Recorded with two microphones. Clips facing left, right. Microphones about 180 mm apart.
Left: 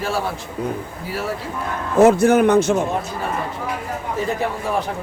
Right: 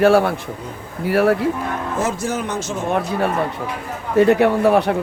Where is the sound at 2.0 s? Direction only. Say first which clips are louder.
Left 13 dB; 60° left (ahead or behind).